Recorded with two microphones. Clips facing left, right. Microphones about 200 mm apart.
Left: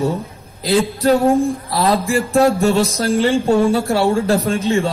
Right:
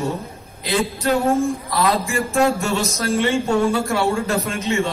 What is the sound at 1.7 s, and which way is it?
Speech, 35° left (ahead or behind).